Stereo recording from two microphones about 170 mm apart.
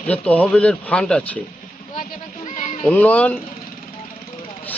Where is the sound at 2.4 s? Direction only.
45° left (ahead or behind).